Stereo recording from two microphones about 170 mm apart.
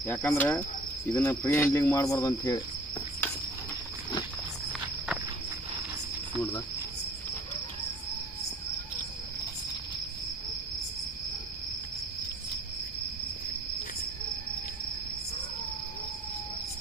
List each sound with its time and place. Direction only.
0.0 s cricket: 10° left (ahead or behind)